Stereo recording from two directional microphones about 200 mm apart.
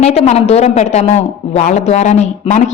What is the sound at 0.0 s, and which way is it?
A man's voice, 35° left (ahead or behind).